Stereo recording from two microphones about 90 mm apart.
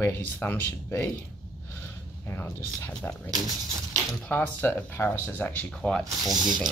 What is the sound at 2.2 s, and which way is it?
Speech, 20° left (ahead or behind).